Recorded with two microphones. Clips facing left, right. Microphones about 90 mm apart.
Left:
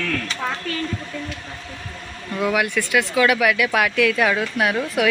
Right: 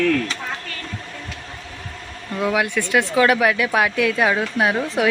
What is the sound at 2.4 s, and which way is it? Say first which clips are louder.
Speech: even; 25° right (ahead or behind).